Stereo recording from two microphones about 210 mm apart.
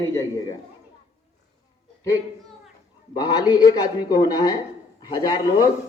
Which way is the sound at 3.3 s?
15° left (ahead or behind).